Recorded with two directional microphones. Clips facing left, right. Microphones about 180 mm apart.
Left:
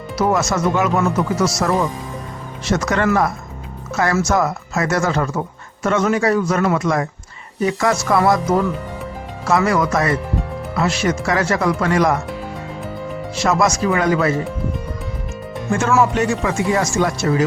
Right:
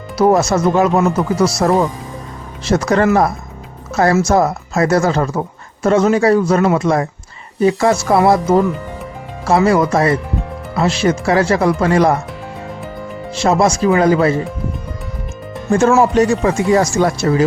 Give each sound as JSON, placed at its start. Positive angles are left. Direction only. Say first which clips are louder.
{"t": 0.2, "sound": "speech", "louder": "right 5 dB", "side_deg": -35}
{"t": 13.3, "sound": "speech", "louder": "right 4 dB", "side_deg": -30}
{"t": 15.7, "sound": "speech", "louder": "right 5 dB", "side_deg": -35}